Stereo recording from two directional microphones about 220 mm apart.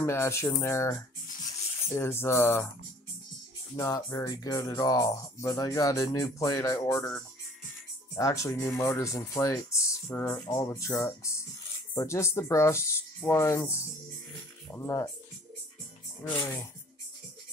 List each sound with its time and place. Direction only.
0.0 s speech: 10° left (ahead or behind)
2.0 s speech: 10° left (ahead or behind)
3.7 s speech: 10° left (ahead or behind)
16.3 s speech: 10° left (ahead or behind)